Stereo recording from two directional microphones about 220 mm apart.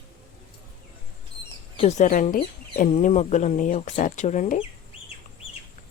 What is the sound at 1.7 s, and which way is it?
Speech, 30° left (ahead or behind).